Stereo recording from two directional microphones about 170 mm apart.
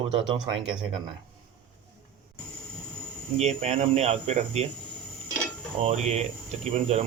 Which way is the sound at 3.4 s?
40° right (ahead or behind).